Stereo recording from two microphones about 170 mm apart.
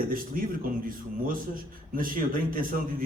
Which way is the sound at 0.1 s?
55° right (ahead or behind).